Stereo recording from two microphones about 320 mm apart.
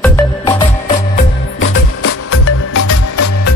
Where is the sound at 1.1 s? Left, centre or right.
Left.